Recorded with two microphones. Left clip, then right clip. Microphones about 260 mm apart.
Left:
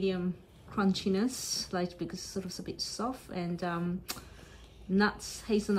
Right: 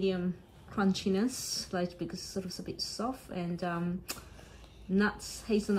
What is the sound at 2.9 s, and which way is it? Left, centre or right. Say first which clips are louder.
A woman's voice: left 1 dB; centre.